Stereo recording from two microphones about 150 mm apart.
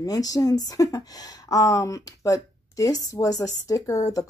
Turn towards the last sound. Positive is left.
turn(degrees=25)  # may be behind; listen again after turning